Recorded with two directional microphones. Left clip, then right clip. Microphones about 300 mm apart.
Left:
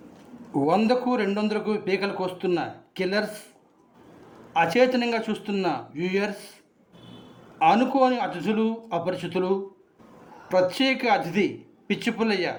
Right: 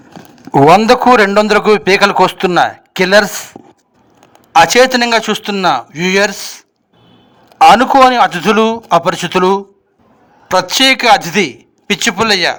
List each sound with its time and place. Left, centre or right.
0.6 s a man's voice: right
4.6 s a man's voice: right
7.7 s a man's voice: right